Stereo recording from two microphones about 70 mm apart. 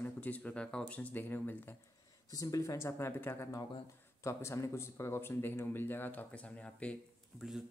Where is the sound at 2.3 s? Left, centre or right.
Left.